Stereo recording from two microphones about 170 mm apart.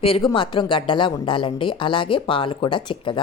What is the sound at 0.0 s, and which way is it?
A woman's voice, 30° left (ahead or behind).